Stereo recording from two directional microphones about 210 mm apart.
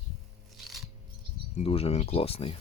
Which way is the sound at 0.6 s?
Centre (ahead or behind).